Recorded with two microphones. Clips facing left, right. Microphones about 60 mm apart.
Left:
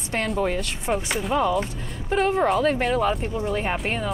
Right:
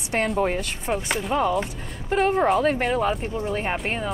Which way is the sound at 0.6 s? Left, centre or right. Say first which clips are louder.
Left 1 dB; centre.